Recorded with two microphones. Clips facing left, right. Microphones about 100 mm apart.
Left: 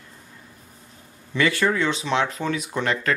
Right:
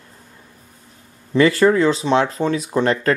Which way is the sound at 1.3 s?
35° right (ahead or behind).